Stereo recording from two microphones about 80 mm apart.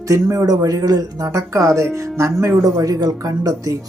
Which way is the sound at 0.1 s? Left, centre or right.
Right.